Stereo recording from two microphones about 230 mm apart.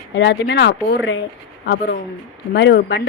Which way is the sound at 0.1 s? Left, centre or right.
Left.